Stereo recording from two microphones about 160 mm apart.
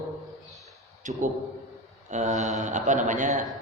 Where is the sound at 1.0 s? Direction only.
50° right (ahead or behind).